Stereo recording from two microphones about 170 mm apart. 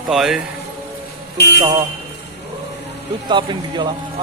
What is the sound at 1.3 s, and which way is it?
Speech, 75° left (ahead or behind).